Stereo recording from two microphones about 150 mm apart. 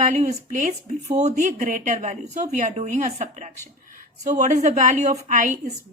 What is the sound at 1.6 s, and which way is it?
A woman's voice, 65° right (ahead or behind).